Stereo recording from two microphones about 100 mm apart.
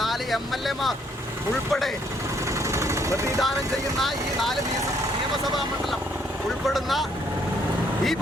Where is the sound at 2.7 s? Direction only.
30° right (ahead or behind).